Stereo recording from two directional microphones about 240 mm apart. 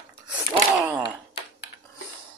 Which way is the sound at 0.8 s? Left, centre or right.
Centre.